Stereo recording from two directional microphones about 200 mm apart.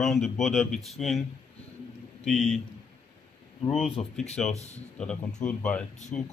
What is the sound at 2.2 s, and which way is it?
Speech, centre (ahead or behind).